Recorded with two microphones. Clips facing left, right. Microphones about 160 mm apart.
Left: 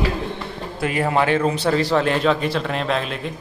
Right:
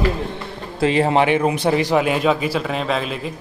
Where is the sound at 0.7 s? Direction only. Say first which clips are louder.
Right 4 dB; 25° right (ahead or behind); by 3.3 s centre (ahead or behind).